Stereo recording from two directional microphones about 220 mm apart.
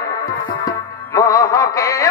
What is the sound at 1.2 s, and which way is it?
Speech, 15° left (ahead or behind).